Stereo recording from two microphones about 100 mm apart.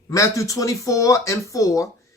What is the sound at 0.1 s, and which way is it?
Speech, 35° left (ahead or behind).